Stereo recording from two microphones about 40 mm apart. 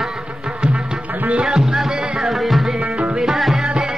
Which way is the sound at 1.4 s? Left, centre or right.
Centre.